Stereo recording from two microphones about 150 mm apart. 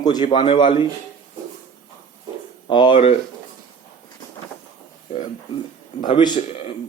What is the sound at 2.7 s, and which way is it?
Speech, 35° left (ahead or behind).